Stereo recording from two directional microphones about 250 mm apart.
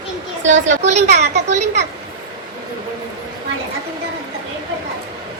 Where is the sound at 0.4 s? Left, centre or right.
Right.